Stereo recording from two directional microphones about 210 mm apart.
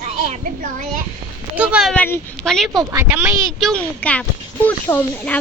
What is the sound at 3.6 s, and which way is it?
A woman's voice, 5° left (ahead or behind).